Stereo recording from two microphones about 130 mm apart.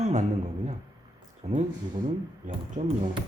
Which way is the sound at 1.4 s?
60° right (ahead or behind).